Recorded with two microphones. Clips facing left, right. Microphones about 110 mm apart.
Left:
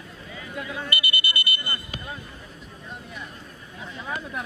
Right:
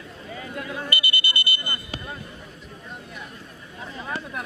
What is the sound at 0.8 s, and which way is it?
Alarm, 25° right (ahead or behind).